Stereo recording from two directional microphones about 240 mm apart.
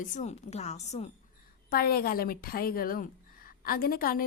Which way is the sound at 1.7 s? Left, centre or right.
Left.